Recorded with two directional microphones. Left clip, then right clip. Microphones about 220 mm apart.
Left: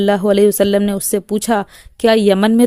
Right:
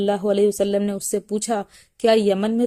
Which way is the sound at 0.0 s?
35° left (ahead or behind).